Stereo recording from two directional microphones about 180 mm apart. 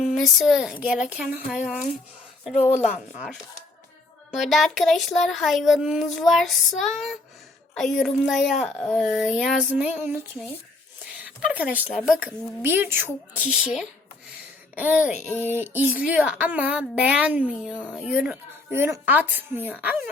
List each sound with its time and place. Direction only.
0.0 s speech: centre (ahead or behind)
2.5 s speech: 40° left (ahead or behind)
4.4 s speech: centre (ahead or behind)
11.0 s a sound: 10° right (ahead or behind)
12.0 s speech: 10° right (ahead or behind)